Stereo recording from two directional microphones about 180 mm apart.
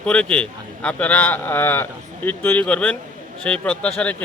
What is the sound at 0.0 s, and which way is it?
A man's voice, 5° left (ahead or behind).